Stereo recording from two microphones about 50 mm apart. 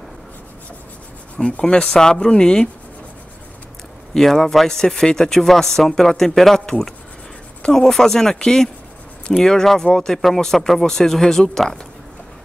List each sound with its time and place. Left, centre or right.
1.4 s speech: centre
4.1 s speech: centre